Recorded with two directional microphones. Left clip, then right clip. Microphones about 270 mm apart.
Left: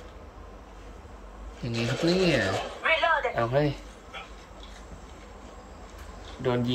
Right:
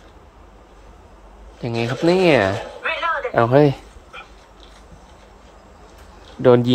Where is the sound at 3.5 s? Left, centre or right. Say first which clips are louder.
Right 15 dB; centre.